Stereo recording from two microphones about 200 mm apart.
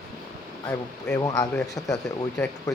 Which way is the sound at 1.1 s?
20° left (ahead or behind).